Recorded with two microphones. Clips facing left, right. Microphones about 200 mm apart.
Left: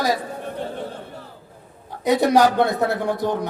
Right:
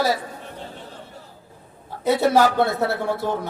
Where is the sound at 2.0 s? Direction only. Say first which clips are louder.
Left 1 dB; 15° left (ahead or behind).